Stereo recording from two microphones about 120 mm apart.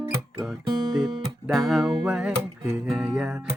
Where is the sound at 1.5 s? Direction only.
Centre (ahead or behind).